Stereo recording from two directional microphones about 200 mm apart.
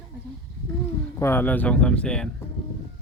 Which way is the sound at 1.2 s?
10° left (ahead or behind).